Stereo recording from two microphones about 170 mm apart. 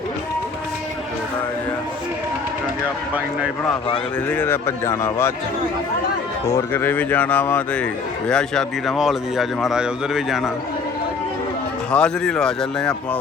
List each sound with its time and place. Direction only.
4.3 s speech: 10° left (ahead or behind)
6.4 s speech: 15° left (ahead or behind); by 10.5 s centre (ahead or behind)
11.9 s speech: 5° left (ahead or behind)